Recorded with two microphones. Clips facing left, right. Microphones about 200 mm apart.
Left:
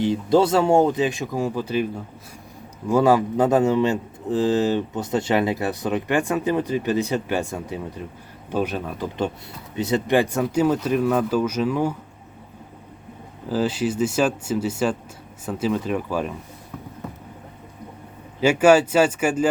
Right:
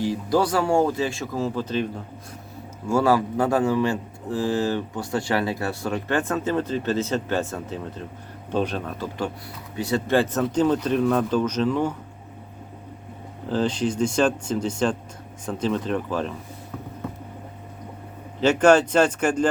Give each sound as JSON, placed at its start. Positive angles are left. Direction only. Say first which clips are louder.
{"t": 0.0, "sound": "speech", "louder": "left 4 dB", "side_deg": 25}
{"t": 2.9, "sound": "a man's voice", "louder": "left 3 dB", "side_deg": 20}
{"t": 9.7, "sound": "a man's voice", "louder": "left 2 dB", "side_deg": 20}
{"t": 13.5, "sound": "a man's voice", "louder": "left 1 dB", "side_deg": 5}
{"t": 18.3, "sound": "a man's voice", "louder": "left 1 dB", "side_deg": 10}